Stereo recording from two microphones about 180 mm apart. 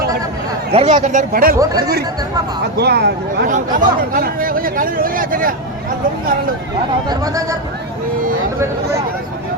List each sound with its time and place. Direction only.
0.7 s speech: 35° right (ahead or behind); by 1.5 s 50° right (ahead or behind)
2.7 s speech: 65° right (ahead or behind)
3.5 s speech: 45° right (ahead or behind)
8.5 s speech: 15° right (ahead or behind)